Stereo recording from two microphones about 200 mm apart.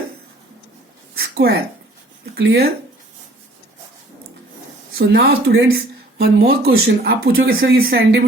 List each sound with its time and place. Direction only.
1.1 s a sound: 55° right (ahead or behind)
2.3 s speech: 55° right (ahead or behind)
4.9 s speech: 55° right (ahead or behind)